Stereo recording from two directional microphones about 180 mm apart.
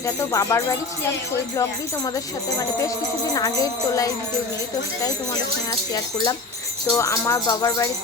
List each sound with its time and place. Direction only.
0.0 s music: 20° left (ahead or behind)
2.1 s music: 20° left (ahead or behind)
5.9 s music: 20° left (ahead or behind)
6.9 s speech: 15° left (ahead or behind)